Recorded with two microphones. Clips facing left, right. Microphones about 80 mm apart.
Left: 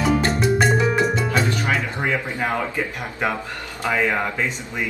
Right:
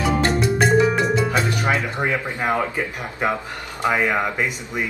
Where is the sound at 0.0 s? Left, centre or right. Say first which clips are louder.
Even; centre.